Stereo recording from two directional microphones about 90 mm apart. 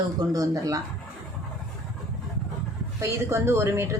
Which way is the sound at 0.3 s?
40° right (ahead or behind).